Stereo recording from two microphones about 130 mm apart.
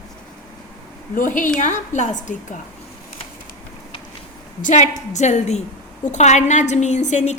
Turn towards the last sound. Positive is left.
turn(degrees=65)  # may be behind; listen again after turning